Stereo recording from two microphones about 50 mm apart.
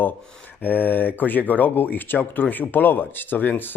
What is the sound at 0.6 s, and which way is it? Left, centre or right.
Speech, left.